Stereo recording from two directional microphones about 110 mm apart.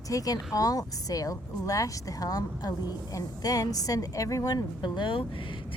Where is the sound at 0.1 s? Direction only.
30° left (ahead or behind).